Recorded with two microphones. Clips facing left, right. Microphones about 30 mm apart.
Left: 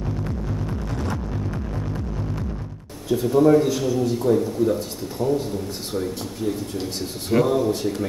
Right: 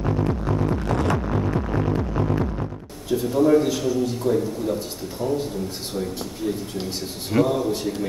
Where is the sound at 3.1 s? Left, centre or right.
Centre.